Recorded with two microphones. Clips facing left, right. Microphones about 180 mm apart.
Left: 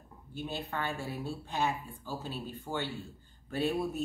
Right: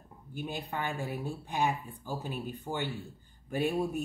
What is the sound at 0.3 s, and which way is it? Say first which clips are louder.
A woman's voice: even; 15° right (ahead or behind).